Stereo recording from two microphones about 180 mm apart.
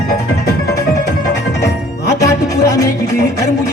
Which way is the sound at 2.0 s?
20° left (ahead or behind).